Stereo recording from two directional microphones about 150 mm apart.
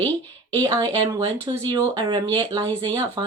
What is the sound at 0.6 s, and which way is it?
Speech, 25° right (ahead or behind).